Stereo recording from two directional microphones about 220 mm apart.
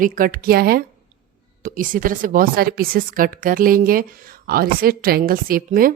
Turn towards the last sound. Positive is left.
turn(degrees=-40)  # may be behind; listen again after turning